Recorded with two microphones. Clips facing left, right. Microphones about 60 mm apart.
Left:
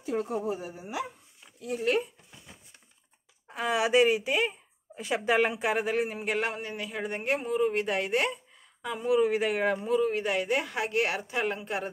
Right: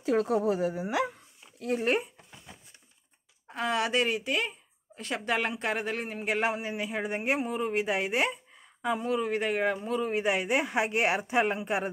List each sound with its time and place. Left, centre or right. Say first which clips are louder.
0.0 s a woman's voice: right 5 dB; right
1.6 s speech: right 3 dB; right
3.4 s speech: left 1 dB; centre
6.2 s a man's voice: right 1 dB; centre
9.0 s speech: left 8 dB; centre
10.0 s speech: even; centre